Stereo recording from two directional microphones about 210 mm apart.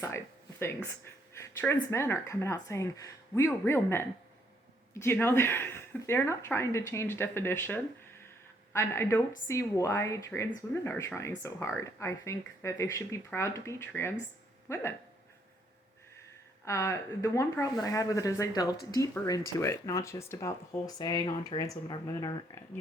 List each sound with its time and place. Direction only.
1.0 s speech: 10° left (ahead or behind)
16.6 s speech: 15° left (ahead or behind)